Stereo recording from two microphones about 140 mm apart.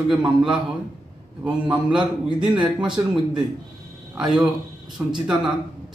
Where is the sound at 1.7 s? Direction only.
10° right (ahead or behind).